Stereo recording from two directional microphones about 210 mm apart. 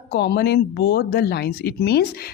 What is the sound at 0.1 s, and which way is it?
Speech, 50° left (ahead or behind).